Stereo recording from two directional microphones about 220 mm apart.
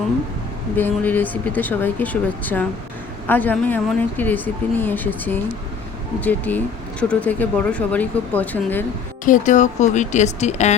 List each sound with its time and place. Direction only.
0.8 s speech: 10° left (ahead or behind)
9.2 s speech: 35° left (ahead or behind)